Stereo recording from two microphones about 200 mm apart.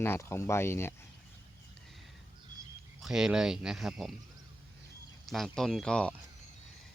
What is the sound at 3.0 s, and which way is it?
Speech, centre (ahead or behind).